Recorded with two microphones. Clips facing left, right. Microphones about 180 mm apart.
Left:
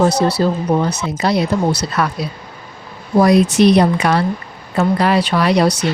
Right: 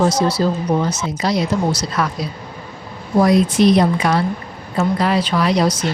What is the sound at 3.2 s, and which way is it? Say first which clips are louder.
Speech: left 2 dB; 70° left (ahead or behind).